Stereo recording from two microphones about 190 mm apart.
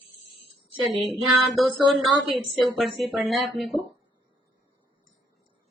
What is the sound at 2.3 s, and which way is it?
A woman's voice, centre (ahead or behind).